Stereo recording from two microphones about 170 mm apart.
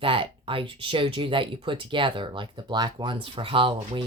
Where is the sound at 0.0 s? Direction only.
30° right (ahead or behind).